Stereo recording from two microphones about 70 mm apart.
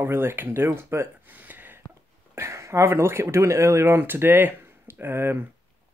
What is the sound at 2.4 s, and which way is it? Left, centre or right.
Speech, right.